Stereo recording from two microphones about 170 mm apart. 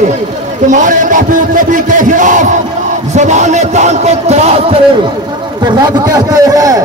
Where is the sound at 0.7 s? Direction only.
50° right (ahead or behind).